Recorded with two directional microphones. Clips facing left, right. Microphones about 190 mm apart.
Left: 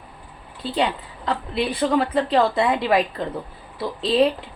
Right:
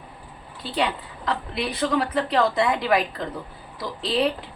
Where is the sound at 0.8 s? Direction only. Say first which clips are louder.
Left 2 dB; 25° left (ahead or behind).